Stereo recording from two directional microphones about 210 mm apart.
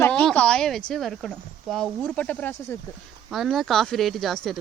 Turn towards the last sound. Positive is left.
turn(degrees=0)  # may be behind; listen again after turning